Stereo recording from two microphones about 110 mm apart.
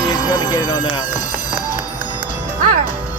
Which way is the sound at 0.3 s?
35° left (ahead or behind).